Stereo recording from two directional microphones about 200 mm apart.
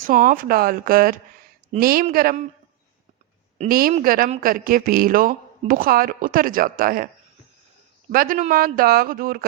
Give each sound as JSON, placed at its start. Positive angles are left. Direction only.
{"t": 0.0, "sound": "a man's voice", "side_deg": -40}
{"t": 3.6, "sound": "speech", "side_deg": -45}
{"t": 8.1, "sound": "speech", "side_deg": -45}